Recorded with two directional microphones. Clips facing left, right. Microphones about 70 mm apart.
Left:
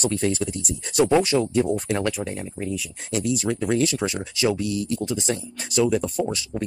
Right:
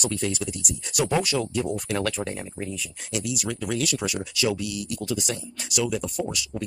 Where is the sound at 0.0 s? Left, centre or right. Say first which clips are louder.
Left 4 dB; left.